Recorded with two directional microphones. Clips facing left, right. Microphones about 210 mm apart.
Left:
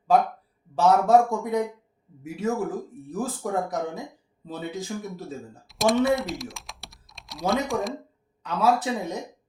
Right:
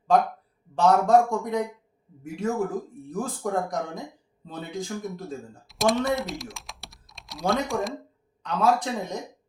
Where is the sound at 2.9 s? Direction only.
5° left (ahead or behind).